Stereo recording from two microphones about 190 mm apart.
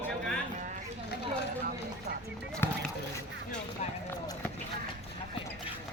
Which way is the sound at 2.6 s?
10° left (ahead or behind).